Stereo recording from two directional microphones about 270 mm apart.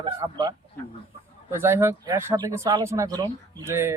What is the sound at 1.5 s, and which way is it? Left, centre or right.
Speech, centre.